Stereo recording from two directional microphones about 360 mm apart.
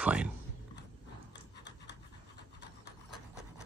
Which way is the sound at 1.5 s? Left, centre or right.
Left.